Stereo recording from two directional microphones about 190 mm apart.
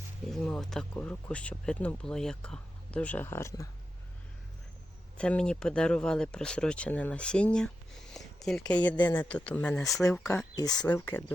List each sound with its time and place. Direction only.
0.3 s speech: centre (ahead or behind)
5.1 s speech: 5° left (ahead or behind)
10.2 s speech: 20° left (ahead or behind)